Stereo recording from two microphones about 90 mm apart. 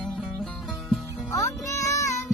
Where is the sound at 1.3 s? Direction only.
35° left (ahead or behind).